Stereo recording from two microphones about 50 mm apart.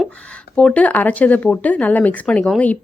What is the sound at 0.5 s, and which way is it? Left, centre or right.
A woman's voice, left.